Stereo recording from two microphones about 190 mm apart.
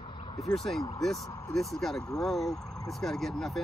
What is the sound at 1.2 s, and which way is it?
Speech, 15° left (ahead or behind).